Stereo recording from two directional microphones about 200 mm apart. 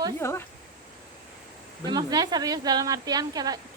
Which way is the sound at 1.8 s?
20° right (ahead or behind).